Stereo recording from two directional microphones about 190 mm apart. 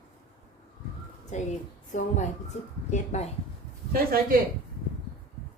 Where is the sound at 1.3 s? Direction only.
40° left (ahead or behind).